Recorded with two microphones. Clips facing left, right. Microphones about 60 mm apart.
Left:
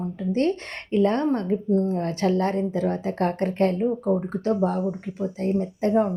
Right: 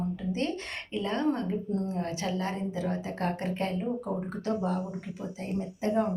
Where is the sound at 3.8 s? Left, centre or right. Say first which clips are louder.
Left 9 dB; left.